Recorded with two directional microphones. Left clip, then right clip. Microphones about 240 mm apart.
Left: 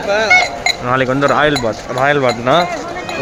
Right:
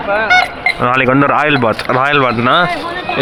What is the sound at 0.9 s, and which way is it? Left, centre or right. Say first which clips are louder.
Speech: right 3 dB; centre.